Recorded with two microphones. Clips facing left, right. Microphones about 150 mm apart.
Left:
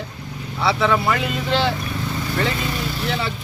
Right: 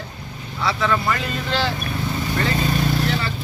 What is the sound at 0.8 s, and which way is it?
Speech, 10° left (ahead or behind).